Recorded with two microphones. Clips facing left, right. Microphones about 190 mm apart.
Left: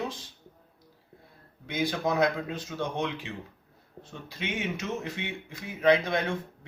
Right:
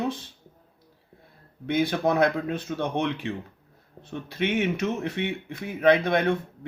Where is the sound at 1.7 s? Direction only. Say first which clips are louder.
Right 5 dB; 60° right (ahead or behind).